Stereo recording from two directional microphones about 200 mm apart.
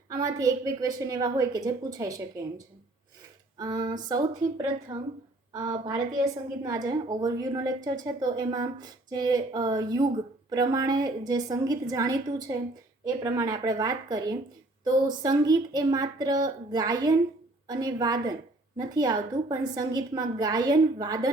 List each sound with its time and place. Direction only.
0.1 s a woman's voice: 15° right (ahead or behind)
3.6 s a woman's voice: 20° right (ahead or behind)